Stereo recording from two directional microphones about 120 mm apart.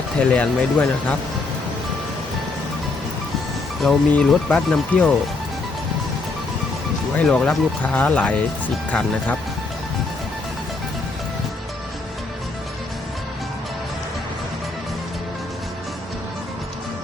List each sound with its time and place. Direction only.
0.2 s speech: 10° left (ahead or behind)
3.8 s speech: 5° left (ahead or behind)
7.2 s speech: 5° left (ahead or behind)